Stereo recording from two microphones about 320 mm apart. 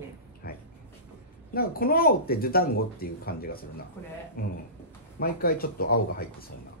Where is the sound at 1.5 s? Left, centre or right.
Left.